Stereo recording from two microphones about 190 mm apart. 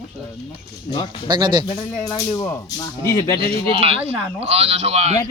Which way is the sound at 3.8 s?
30° right (ahead or behind).